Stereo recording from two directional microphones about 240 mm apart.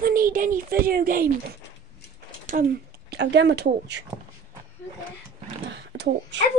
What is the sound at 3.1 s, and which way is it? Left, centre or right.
Speech, right.